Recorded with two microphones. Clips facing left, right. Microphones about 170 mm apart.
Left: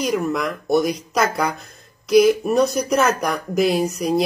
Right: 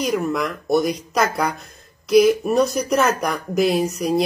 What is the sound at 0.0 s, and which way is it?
Speech, centre (ahead or behind).